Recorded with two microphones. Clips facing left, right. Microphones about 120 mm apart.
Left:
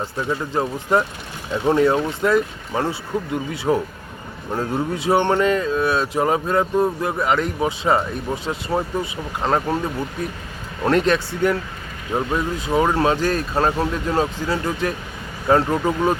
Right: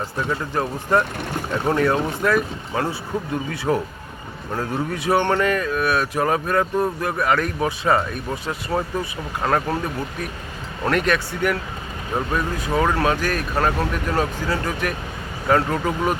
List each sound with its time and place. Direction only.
0.3 s speech: 20° left (ahead or behind)